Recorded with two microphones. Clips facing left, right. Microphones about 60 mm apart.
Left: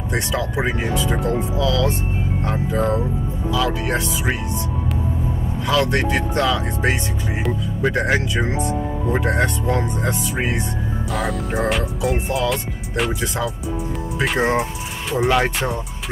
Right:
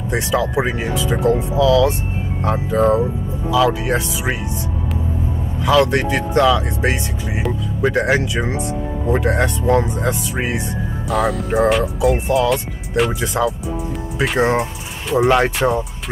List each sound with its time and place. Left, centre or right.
0.1 s speech: centre
5.7 s speech: centre
15.6 s speech: right